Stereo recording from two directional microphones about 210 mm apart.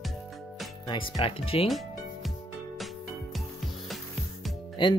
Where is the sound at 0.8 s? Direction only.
20° left (ahead or behind).